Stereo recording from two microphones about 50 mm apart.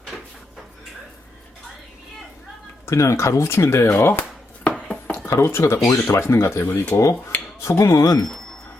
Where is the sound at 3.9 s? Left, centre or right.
Left.